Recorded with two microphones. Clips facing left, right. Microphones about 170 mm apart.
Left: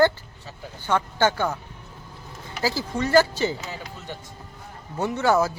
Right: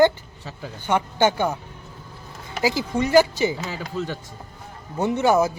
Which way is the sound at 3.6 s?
90° right.